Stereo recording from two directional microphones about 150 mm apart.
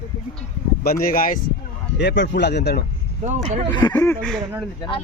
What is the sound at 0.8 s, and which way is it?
Speech, 80° left.